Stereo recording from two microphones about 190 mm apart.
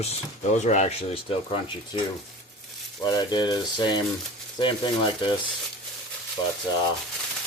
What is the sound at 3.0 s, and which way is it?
Speech, 20° left (ahead or behind).